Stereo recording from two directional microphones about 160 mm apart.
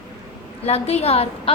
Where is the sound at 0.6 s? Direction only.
40° left (ahead or behind).